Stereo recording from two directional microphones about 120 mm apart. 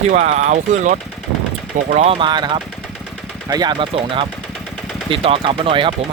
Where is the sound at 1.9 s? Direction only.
60° right (ahead or behind).